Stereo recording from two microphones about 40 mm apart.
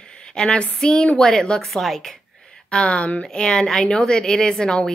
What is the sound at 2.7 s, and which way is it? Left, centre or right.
Speech, left.